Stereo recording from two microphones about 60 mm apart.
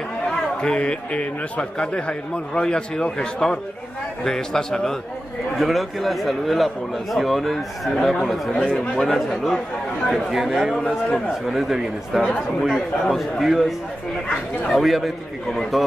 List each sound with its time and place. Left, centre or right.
0.6 s a man's voice: centre